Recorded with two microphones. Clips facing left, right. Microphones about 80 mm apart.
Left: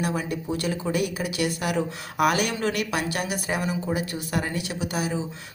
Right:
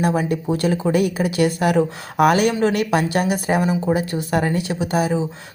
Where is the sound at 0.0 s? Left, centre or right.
Right.